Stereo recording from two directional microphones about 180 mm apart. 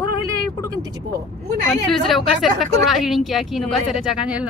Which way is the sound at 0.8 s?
20° right (ahead or behind).